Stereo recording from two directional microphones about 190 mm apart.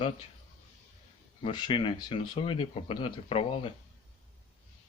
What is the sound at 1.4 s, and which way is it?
Speech, 25° left (ahead or behind).